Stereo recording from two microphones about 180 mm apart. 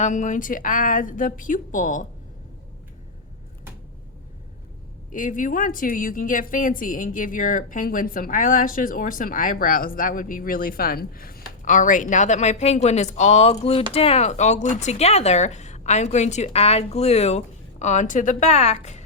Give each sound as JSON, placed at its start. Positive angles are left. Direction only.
{"t": 0.0, "sound": "a woman's voice", "side_deg": 45}
{"t": 5.1, "sound": "a woman's voice", "side_deg": 45}